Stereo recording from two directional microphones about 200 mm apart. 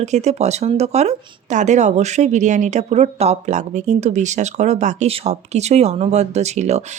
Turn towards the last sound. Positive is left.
turn(degrees=-35)  # may be behind; listen again after turning